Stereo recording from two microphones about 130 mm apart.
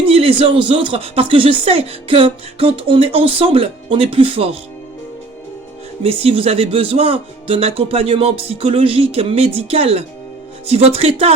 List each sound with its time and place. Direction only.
0.0 s speech: 45° right (ahead or behind)
6.0 s speech: 45° right (ahead or behind)